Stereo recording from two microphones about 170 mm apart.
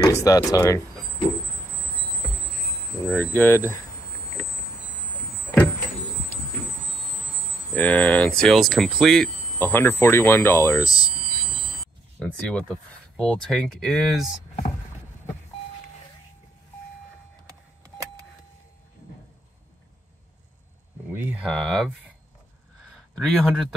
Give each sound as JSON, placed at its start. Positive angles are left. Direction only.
{"t": 0.0, "sound": "speech", "side_deg": 20}
{"t": 3.0, "sound": "speech", "side_deg": 15}
{"t": 7.7, "sound": "speech", "side_deg": 10}
{"t": 12.2, "sound": "speech", "side_deg": 5}
{"t": 21.1, "sound": "speech", "side_deg": -10}
{"t": 23.1, "sound": "speech", "side_deg": 0}